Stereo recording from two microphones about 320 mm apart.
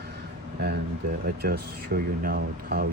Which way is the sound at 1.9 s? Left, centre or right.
Right.